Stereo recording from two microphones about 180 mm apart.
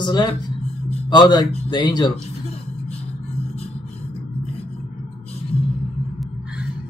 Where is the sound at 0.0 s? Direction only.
25° left (ahead or behind).